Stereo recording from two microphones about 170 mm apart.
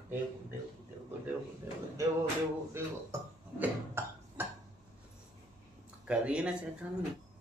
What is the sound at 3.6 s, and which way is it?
Burping, 10° right (ahead or behind).